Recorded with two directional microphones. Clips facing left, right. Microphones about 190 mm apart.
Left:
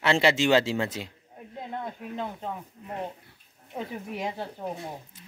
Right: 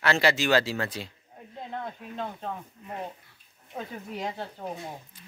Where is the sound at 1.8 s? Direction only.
10° left (ahead or behind).